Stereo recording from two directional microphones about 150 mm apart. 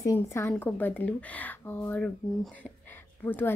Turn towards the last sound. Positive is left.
turn(degrees=15)  # may be behind; listen again after turning